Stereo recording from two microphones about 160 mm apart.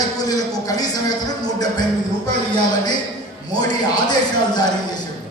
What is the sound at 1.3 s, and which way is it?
Speech, 25° left (ahead or behind).